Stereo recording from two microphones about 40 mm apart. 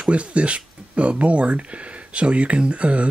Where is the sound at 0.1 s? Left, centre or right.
Right.